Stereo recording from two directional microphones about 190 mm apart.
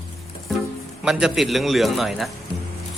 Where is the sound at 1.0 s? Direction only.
5° right (ahead or behind).